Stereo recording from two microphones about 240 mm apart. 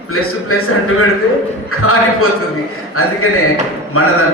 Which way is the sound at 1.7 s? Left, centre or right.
Left.